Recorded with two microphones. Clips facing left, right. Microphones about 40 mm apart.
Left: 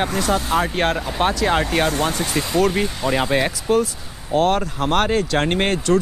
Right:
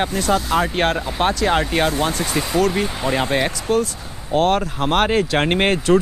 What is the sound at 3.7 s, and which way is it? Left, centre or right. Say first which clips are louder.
Speech: left 1 dB; centre.